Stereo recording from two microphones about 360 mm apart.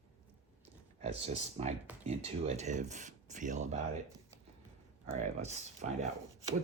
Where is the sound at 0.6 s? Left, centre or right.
Centre.